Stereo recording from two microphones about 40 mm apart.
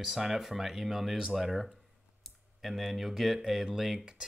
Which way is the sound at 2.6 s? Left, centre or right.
Centre.